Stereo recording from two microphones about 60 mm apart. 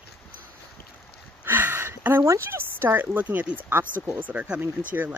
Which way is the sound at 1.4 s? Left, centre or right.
Right.